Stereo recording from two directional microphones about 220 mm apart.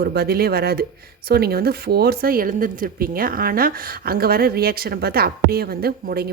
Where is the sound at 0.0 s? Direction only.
45° right (ahead or behind).